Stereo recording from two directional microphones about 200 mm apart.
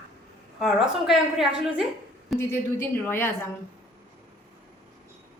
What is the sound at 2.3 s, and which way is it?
Speech, 10° left (ahead or behind).